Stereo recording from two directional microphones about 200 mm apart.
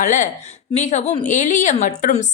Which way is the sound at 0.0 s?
40° left (ahead or behind).